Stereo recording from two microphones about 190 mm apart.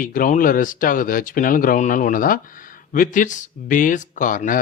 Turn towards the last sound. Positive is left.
turn(degrees=45)  # may be behind; listen again after turning